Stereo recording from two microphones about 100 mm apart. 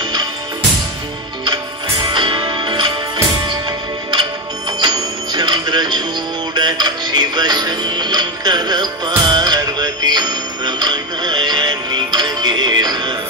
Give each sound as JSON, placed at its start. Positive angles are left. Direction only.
{"t": 2.0, "sound": "music", "side_deg": -55}
{"t": 4.7, "sound": "music", "side_deg": -50}